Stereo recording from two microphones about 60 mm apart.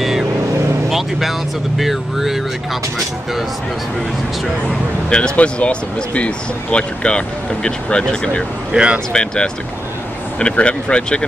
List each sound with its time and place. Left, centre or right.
0.8 s vehicle: centre
1.8 s speech: centre
4.6 s speech: centre
8.7 s speech: centre
9.1 s speech: centre
10.5 s speech: centre